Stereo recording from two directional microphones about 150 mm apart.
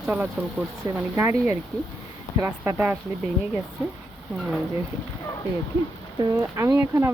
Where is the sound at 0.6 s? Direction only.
5° right (ahead or behind).